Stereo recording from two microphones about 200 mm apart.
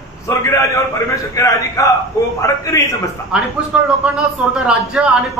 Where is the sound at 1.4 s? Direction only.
15° left (ahead or behind).